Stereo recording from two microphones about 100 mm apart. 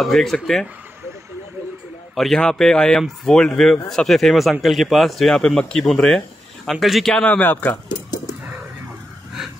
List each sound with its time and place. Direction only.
0.0 s a man's voice: 5° left (ahead or behind)
2.1 s a man's voice: 5° left (ahead or behind)
7.2 s speech: 15° left (ahead or behind)